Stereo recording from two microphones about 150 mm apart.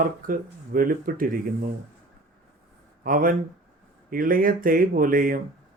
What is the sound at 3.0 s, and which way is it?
Speech, 65° right (ahead or behind).